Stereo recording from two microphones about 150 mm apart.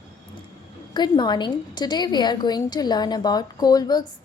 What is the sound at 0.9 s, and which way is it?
A woman's voice, 30° left (ahead or behind).